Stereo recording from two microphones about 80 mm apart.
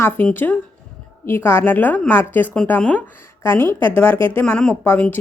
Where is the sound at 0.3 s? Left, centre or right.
Left.